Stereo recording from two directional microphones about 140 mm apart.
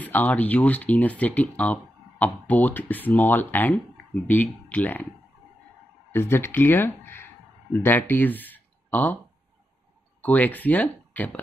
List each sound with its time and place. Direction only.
0.0 s speech: 10° left (ahead or behind)
6.1 s speech: 15° left (ahead or behind)
10.2 s speech: 10° left (ahead or behind)